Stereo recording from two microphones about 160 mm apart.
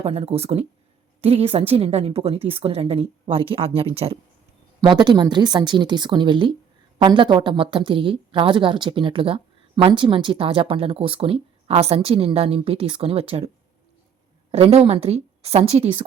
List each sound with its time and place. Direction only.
0.0 s a woman's voice: 40° right (ahead or behind)
4.9 s a woman's voice: 25° right (ahead or behind)
14.5 s a woman's voice: 40° right (ahead or behind)